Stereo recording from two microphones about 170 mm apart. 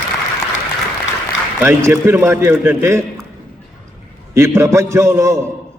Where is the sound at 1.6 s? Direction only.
15° right (ahead or behind).